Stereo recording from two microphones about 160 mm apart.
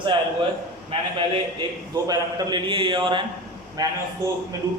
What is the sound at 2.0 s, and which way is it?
A man's voice, 25° right (ahead or behind).